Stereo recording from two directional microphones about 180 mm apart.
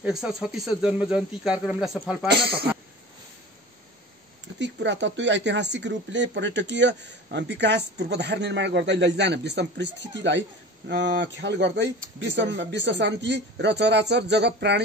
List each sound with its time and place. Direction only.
0.0 s speech: 5° right (ahead or behind)
2.3 s speech: 65° right (ahead or behind)
4.6 s speech: 80° right